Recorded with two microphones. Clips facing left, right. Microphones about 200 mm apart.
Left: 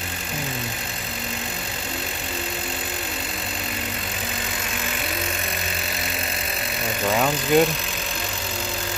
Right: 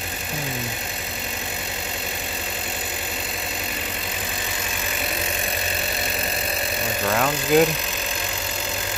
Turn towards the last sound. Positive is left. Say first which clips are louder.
# even
turn(degrees=0)  # may be behind; listen again after turning